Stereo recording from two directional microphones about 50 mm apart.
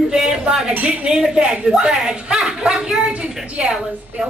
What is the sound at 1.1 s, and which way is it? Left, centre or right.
Speech, centre.